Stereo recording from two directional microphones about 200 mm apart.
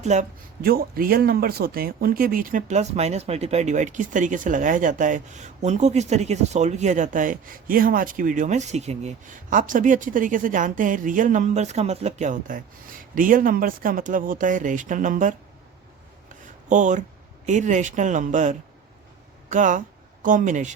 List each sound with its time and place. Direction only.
0.0 s speech: 35° right (ahead or behind)
16.6 s speech: 40° right (ahead or behind)